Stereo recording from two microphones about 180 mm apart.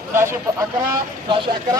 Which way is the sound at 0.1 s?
15° right (ahead or behind).